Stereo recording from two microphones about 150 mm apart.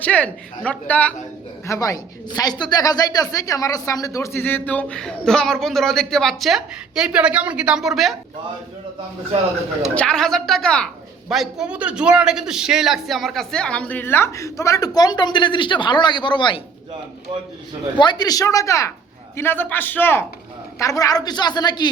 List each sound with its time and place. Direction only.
0.0 s a woman's voice: 10° left (ahead or behind)
9.9 s a woman's voice: 5° left (ahead or behind); by 16.6 s 30° left (ahead or behind)
17.9 s a woman's voice: 30° left (ahead or behind)